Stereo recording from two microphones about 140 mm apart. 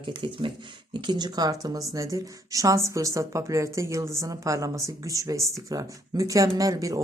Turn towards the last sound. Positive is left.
turn(degrees=-25)  # may be behind; listen again after turning